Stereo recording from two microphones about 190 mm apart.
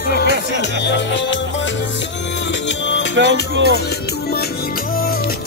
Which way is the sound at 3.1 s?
70° right (ahead or behind).